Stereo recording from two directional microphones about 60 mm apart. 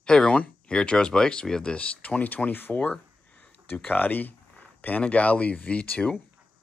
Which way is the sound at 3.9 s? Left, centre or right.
Left.